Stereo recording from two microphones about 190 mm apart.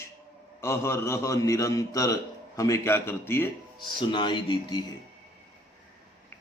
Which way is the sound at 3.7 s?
25° left (ahead or behind).